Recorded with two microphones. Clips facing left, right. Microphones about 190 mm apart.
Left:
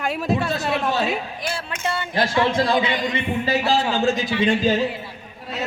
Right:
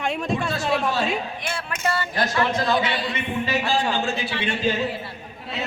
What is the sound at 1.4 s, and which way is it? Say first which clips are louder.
Speech: left 1 dB; 35° left (ahead or behind).